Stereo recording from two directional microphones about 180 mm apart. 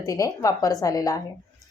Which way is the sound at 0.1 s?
20° left (ahead or behind).